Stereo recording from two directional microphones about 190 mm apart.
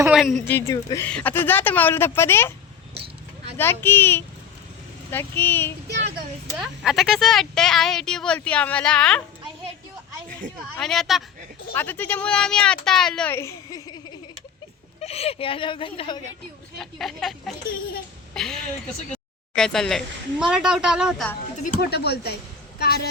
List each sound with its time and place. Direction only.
0.0 s speech: 5° right (ahead or behind)
0.4 s speech: 10° left (ahead or behind)
3.6 s speech: 10° left (ahead or behind)
6.6 s speech: centre (ahead or behind)
10.6 s speech: centre (ahead or behind); by 13.9 s 20° left (ahead or behind)
15.0 s speech: 30° left (ahead or behind)
16.7 s speech: centre (ahead or behind)
18.3 s a sound: centre (ahead or behind)
19.1 s speech: 5° left (ahead or behind)
21.6 s speech: 55° left (ahead or behind)